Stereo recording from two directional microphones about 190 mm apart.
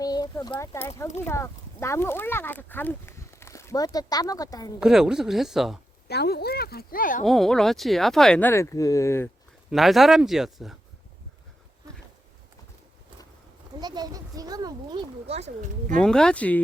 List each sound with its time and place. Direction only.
0.0 s speech: 20° left (ahead or behind)
4.8 s speech: 5° right (ahead or behind)
6.1 s speech: 60° left (ahead or behind)
7.3 s speech: centre (ahead or behind)
9.6 s speech: centre (ahead or behind)
13.8 s a child's voice: 20° right (ahead or behind)
16.0 s speech: 5° left (ahead or behind)